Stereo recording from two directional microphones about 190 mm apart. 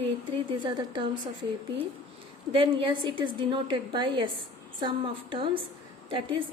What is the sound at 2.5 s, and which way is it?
A woman's voice, 25° right (ahead or behind).